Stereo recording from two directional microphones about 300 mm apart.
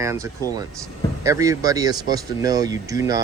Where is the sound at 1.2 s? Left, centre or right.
Centre.